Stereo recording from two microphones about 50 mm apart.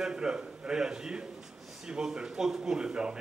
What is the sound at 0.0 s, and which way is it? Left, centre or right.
A man's voice, centre.